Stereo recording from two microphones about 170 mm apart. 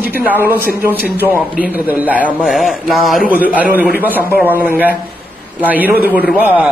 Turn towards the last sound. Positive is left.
turn(degrees=-10)  # may be behind; listen again after turning